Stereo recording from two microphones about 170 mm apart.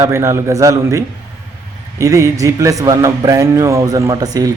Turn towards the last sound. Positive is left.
turn(degrees=-20)  # may be behind; listen again after turning